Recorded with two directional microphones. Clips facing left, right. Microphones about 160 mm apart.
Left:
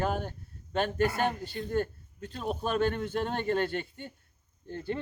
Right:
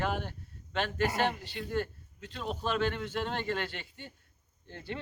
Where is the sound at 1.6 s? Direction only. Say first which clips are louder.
Left 3 dB; 45° left (ahead or behind).